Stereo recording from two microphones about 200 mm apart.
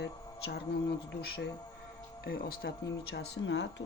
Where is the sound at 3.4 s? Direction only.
60° left (ahead or behind).